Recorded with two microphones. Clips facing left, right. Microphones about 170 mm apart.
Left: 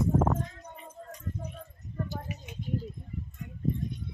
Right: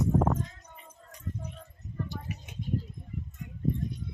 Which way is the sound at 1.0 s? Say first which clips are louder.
Left 10 dB; 45° left (ahead or behind).